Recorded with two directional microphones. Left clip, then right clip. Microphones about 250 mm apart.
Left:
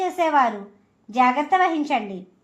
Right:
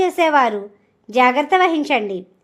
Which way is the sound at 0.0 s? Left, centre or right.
Right.